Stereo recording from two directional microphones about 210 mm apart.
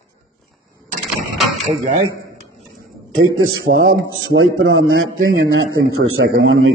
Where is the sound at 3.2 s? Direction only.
75° right (ahead or behind).